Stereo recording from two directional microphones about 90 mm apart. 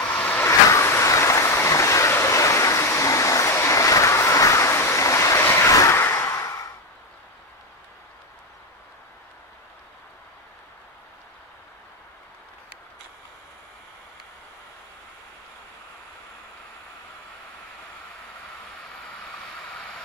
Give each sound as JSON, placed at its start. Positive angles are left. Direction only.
{"t": 0.0, "sound": "vehicle", "side_deg": 15}
{"t": 0.5, "sound": "vehicle", "side_deg": 35}